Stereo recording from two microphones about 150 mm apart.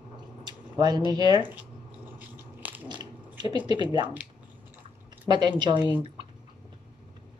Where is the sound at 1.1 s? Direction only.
30° right (ahead or behind).